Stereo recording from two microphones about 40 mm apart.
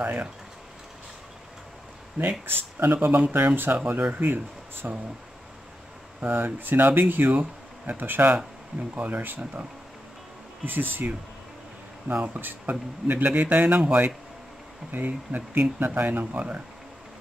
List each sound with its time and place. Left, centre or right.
0.0 s speech: right
2.4 s speech: right
3.3 s speech: right
3.7 s speech: right
4.2 s speech: right
6.3 s speech: right
10.6 s speech: right
12.4 s speech: right
13.7 s speech: right
14.9 s speech: right